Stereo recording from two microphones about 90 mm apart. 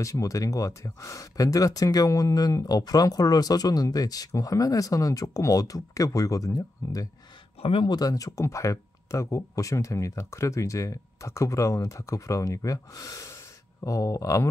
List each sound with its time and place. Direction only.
0.0 s speech: 35° left (ahead or behind)